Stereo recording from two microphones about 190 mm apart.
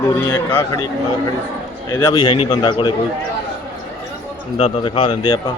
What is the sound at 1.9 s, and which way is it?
A man's voice, 20° left (ahead or behind).